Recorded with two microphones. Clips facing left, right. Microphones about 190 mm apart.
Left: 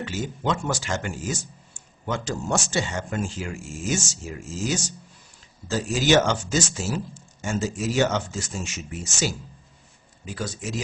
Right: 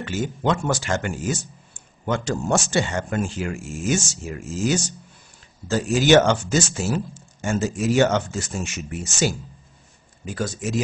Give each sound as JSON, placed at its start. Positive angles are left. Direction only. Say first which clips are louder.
{"t": 0.0, "sound": "speech", "louder": "right 4 dB", "side_deg": -60}